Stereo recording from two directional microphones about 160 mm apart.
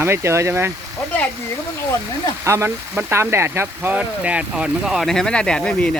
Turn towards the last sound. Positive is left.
turn(degrees=5)  # may be behind; listen again after turning